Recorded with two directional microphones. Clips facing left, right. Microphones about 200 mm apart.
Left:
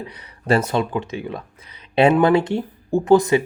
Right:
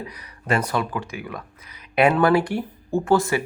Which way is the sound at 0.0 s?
30° left (ahead or behind).